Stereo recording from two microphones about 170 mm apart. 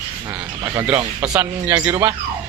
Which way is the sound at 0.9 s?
5° right (ahead or behind).